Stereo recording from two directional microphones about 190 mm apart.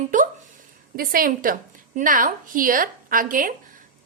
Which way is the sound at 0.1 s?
45° right (ahead or behind).